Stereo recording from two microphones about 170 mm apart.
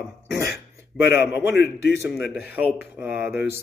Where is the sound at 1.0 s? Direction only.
75° left (ahead or behind).